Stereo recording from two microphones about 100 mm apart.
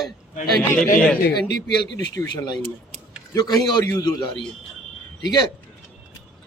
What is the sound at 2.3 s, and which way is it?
A man's voice, 45° left (ahead or behind).